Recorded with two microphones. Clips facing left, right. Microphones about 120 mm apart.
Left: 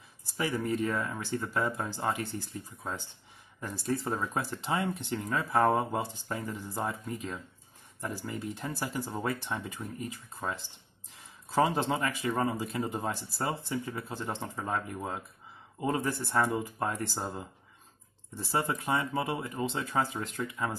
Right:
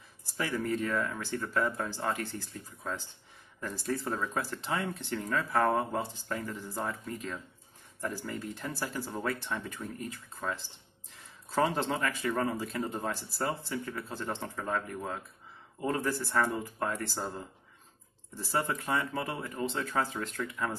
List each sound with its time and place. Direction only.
0.4 s speech: 15° left (ahead or behind)
3.6 s speech: 20° left (ahead or behind)
18.5 s speech: 15° left (ahead or behind)